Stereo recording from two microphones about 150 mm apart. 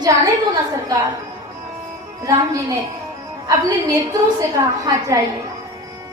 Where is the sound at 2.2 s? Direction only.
25° right (ahead or behind).